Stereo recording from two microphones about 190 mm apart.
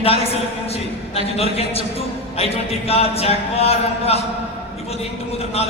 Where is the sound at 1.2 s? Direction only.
30° left (ahead or behind).